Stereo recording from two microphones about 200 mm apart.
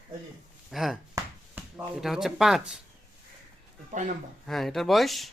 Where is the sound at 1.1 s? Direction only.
5° right (ahead or behind).